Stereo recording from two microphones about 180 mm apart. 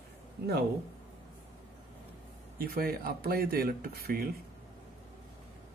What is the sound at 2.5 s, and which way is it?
Speech, 55° right (ahead or behind).